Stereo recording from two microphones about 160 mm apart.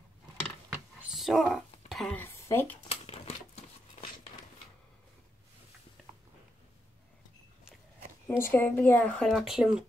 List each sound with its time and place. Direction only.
1.1 s speech: centre (ahead or behind)
2.2 s speech: 15° left (ahead or behind)
2.9 s crumpling: 40° left (ahead or behind)
8.3 s speech: 15° left (ahead or behind); by 9.8 s 5° right (ahead or behind)